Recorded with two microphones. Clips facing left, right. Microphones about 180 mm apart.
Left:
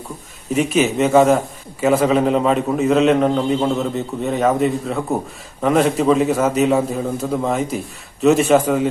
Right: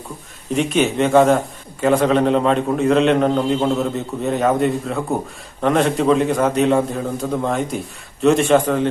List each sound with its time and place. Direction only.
0.5 s a man's voice: 5° left (ahead or behind)